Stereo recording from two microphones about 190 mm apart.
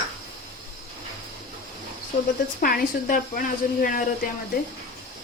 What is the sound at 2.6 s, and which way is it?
Speech, 50° left (ahead or behind).